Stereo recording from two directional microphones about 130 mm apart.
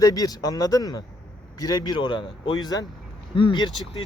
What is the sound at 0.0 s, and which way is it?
A man's voice, 30° left (ahead or behind).